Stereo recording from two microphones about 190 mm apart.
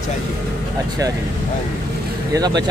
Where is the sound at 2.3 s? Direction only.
20° right (ahead or behind).